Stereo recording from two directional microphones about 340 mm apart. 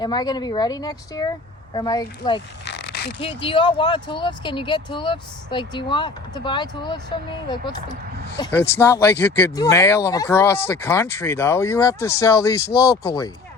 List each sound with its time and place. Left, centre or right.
0.0 s speech: centre
2.6 s a sound: left
3.2 s speech: centre